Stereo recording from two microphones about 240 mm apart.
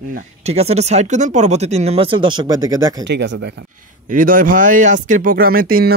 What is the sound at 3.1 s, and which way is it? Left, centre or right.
Speech, right.